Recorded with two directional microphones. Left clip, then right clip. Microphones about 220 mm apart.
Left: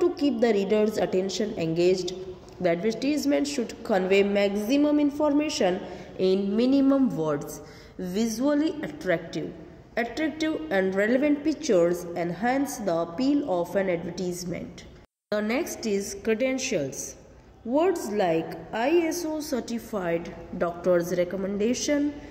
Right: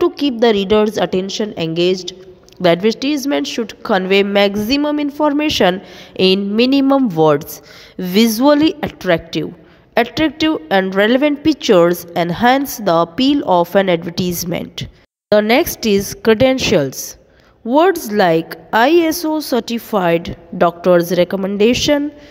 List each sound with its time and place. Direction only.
0.0 s a woman's voice: 40° right (ahead or behind)